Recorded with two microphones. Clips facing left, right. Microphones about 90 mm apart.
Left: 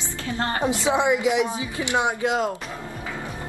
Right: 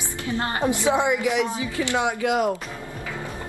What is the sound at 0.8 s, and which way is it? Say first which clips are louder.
Speech: left 1 dB; 20° left (ahead or behind).